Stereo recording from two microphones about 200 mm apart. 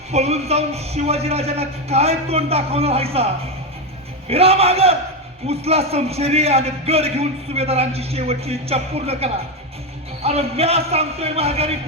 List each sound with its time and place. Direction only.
0.1 s a man's voice: 35° right (ahead or behind)
4.3 s a man's voice: 30° right (ahead or behind)